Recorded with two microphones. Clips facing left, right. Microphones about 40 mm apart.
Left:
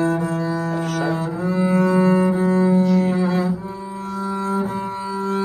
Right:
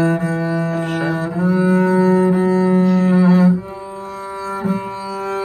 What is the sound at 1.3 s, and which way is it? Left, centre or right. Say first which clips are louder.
Cello: right 5 dB; right.